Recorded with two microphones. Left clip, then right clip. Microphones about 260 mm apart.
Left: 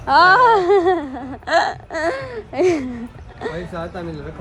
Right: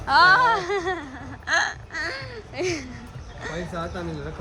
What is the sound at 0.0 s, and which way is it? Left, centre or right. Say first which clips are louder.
Whimper: left 5 dB; centre.